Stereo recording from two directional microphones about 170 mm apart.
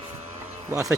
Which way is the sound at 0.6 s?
20° right (ahead or behind).